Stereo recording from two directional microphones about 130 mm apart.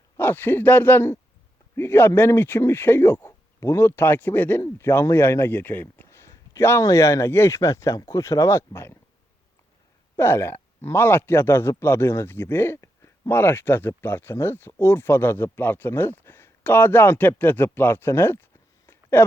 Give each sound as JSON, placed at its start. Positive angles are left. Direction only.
{"t": 0.2, "sound": "a man's voice", "side_deg": 15}
{"t": 10.2, "sound": "a man's voice", "side_deg": 20}